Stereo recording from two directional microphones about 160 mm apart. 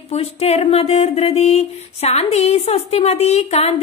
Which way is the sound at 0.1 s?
40° left (ahead or behind).